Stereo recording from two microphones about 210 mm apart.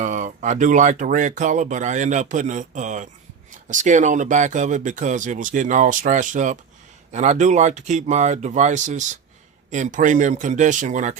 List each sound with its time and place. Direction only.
0.0 s speech: 35° right (ahead or behind)